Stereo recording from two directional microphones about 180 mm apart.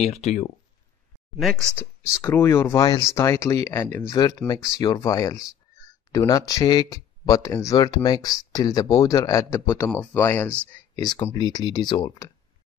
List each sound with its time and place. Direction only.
0.0 s speech: 35° left (ahead or behind)
1.4 s speech: centre (ahead or behind)
2.2 s speech: 15° left (ahead or behind)